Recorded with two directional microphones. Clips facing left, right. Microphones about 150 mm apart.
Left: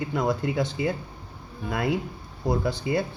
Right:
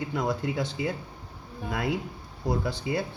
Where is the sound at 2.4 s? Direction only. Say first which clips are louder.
Left 3 dB; 55° left (ahead or behind).